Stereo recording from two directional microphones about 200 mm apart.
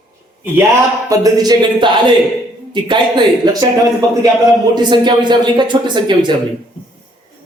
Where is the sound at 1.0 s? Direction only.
15° right (ahead or behind).